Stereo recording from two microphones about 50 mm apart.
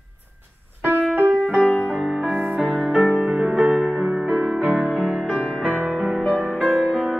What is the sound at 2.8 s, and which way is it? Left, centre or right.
Music, centre.